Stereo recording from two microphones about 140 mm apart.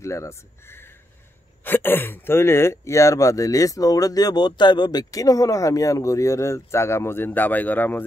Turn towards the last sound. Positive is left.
turn(degrees=15)  # may be behind; listen again after turning